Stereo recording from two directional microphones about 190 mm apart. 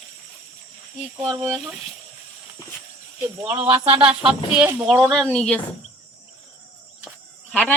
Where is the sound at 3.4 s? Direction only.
5° right (ahead or behind).